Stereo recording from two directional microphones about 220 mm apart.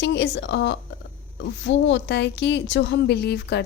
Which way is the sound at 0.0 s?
50° left (ahead or behind).